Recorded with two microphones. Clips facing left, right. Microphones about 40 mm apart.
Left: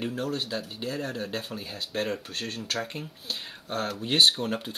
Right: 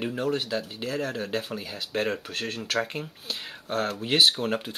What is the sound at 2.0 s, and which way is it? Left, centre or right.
Speech, centre.